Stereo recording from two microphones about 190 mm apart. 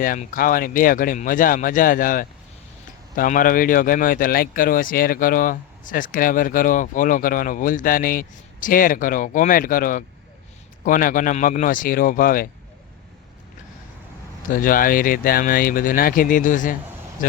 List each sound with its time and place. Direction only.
0.0 s speech: 45° left (ahead or behind)
14.5 s speech: 45° left (ahead or behind)